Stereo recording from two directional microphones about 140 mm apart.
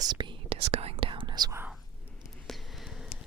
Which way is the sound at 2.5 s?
Centre (ahead or behind).